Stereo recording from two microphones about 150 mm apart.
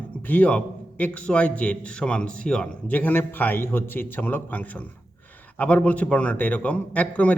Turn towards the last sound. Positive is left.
turn(degrees=10)  # may be behind; listen again after turning